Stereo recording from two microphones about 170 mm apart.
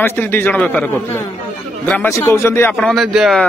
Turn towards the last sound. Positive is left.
turn(degrees=0)  # may be behind; listen again after turning